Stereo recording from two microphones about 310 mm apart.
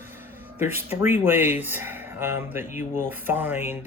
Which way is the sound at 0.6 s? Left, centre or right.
Centre.